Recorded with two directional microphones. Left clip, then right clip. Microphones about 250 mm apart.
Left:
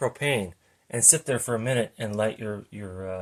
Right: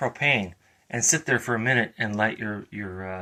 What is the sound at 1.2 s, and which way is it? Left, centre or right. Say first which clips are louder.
Speech: right 3 dB; centre.